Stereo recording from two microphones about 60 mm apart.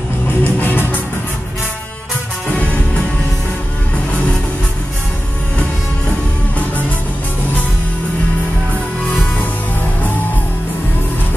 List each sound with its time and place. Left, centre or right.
0.4 s music: left